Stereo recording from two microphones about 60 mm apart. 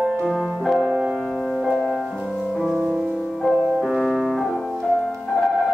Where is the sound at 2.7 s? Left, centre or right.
Centre.